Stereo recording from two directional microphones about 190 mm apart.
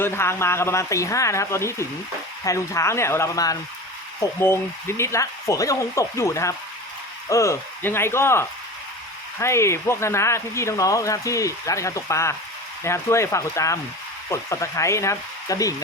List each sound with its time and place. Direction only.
0.0 s speech: 15° left (ahead or behind)